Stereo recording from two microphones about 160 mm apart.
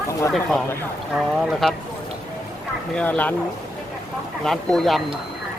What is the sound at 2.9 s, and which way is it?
Speech, 10° left (ahead or behind).